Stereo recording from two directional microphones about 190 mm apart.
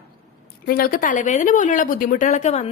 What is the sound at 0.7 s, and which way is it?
Speech, 50° left (ahead or behind).